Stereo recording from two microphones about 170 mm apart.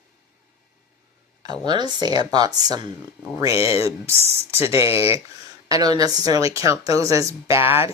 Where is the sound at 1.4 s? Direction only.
25° right (ahead or behind).